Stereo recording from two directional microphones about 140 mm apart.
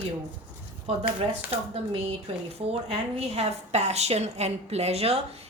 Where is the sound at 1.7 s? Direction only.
45° right (ahead or behind).